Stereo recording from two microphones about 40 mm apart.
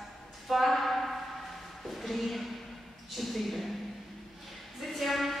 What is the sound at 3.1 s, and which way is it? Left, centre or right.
Speech, centre.